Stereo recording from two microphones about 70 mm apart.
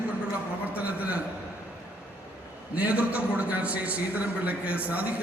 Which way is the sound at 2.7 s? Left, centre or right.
Centre.